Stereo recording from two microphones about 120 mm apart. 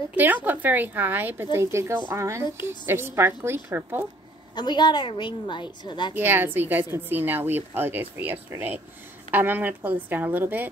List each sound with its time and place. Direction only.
0.1 s a woman's voice: 15° right (ahead or behind)
4.6 s a woman's voice: 35° left (ahead or behind)
6.1 s a woman's voice: 15° right (ahead or behind)